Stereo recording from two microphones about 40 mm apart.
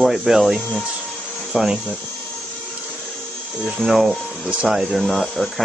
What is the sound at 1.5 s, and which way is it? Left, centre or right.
Speech, right.